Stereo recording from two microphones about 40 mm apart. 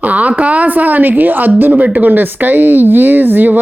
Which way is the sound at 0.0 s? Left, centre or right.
Right.